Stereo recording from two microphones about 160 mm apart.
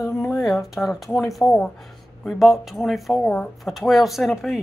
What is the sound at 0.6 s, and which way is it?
Speech, centre (ahead or behind).